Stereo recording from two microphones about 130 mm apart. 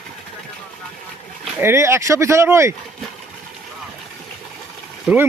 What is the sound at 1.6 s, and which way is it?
Speech, 20° right (ahead or behind).